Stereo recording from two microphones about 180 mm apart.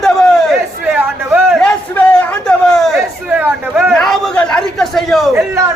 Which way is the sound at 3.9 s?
5° left (ahead or behind).